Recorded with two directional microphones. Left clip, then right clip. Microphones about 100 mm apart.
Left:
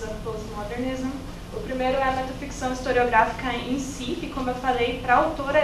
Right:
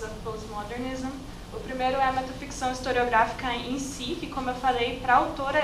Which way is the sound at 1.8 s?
30° right (ahead or behind).